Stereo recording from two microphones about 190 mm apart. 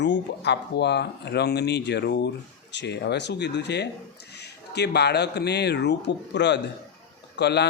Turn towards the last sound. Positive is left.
turn(degrees=60)  # may be behind; listen again after turning